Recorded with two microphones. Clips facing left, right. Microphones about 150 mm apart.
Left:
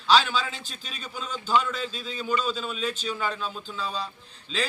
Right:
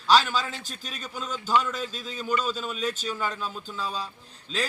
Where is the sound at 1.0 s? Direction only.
10° right (ahead or behind).